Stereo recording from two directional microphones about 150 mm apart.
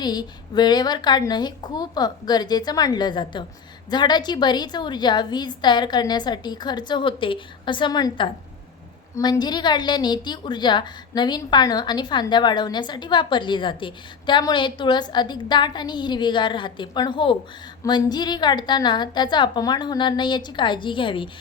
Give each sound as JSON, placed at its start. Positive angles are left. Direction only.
{"t": 0.0, "sound": "a woman's voice", "side_deg": 25}